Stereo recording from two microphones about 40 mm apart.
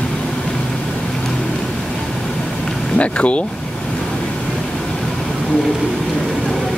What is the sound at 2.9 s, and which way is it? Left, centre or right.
Speech, left.